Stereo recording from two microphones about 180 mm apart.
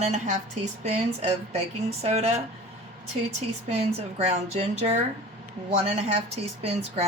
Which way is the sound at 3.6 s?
40° right (ahead or behind).